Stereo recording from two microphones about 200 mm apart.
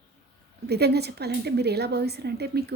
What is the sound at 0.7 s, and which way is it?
A woman's voice, 55° right (ahead or behind).